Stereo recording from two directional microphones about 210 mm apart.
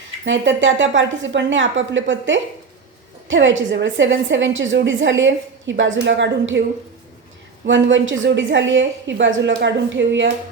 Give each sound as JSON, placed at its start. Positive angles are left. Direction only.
{"t": 0.3, "sound": "a woman's voice", "side_deg": -65}
{"t": 7.7, "sound": "a woman's voice", "side_deg": -60}